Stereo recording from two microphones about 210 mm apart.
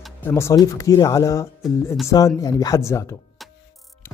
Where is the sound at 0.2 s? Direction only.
10° left (ahead or behind).